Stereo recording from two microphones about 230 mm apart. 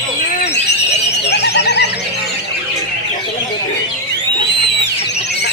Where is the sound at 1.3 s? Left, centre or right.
Left.